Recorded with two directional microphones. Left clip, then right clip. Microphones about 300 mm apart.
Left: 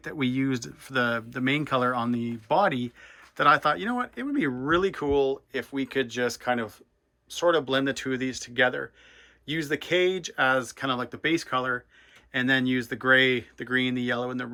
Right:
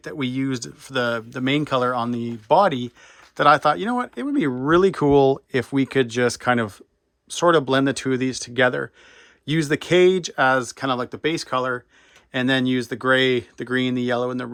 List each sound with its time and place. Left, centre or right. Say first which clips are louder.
0.0 s speech: right 2 dB; centre